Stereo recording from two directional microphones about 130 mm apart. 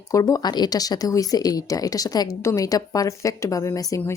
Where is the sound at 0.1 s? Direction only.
25° left (ahead or behind).